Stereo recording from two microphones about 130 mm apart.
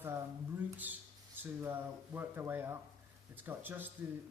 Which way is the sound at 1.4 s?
15° right (ahead or behind).